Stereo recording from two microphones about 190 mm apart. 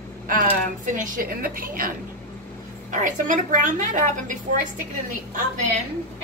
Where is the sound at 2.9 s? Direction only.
40° right (ahead or behind).